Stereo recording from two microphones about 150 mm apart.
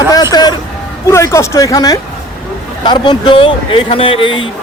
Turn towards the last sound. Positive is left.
turn(degrees=35)  # may be behind; listen again after turning